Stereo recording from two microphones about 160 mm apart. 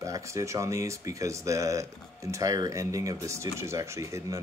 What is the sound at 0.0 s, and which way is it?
Speech, 20° right (ahead or behind).